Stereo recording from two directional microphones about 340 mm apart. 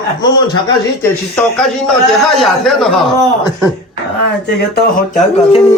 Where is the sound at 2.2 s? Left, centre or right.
Centre.